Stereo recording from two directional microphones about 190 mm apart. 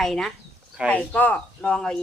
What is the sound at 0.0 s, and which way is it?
Speech, centre (ahead or behind).